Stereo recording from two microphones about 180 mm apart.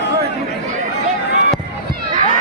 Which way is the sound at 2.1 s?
45° right (ahead or behind).